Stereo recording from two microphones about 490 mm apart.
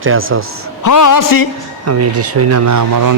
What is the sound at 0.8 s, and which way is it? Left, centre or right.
Speech, left.